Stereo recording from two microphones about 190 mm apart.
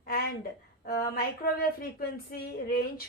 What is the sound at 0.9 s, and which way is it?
Speech, 55° left (ahead or behind).